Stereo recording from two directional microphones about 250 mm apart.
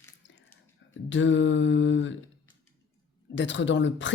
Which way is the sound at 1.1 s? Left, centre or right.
Left.